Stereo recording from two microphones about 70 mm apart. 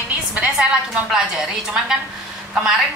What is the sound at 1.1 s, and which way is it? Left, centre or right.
Speech, centre.